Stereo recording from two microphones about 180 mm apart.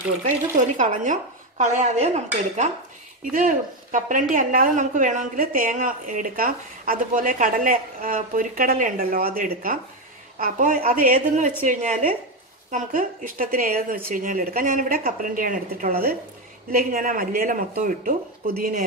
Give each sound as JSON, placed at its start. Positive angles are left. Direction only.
{"t": 0.6, "sound": "a woman's voice", "side_deg": -45}
{"t": 1.6, "sound": "dishes", "side_deg": -40}
{"t": 3.3, "sound": "a woman's voice", "side_deg": -45}